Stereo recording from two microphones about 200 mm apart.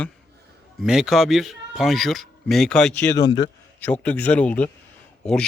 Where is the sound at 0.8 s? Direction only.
Centre (ahead or behind).